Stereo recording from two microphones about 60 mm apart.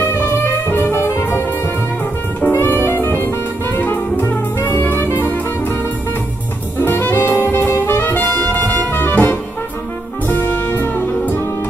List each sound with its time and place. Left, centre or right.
0.7 s music: left
2.5 s jazz: left
3.2 s music: left
6.8 s brass instrument: left
10.2 s music: left